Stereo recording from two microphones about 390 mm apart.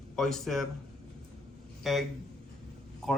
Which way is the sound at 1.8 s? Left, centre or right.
Centre.